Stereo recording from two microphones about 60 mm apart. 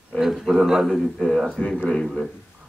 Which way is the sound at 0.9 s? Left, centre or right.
Centre.